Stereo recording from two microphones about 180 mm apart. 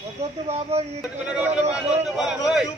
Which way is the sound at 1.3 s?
10° right (ahead or behind).